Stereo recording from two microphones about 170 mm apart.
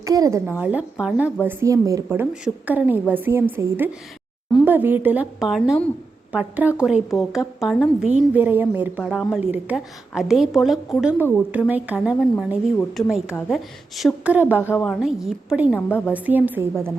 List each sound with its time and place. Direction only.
0.0 s a woman's voice: 20° right (ahead or behind); by 11.1 s centre (ahead or behind)
11.2 s a woman's voice: 10° right (ahead or behind)
14.6 s a woman's voice: 15° left (ahead or behind)
14.8 s a woman's voice: centre (ahead or behind)
15.7 s a woman's voice: 10° left (ahead or behind)
16.1 s a woman's voice: 10° right (ahead or behind)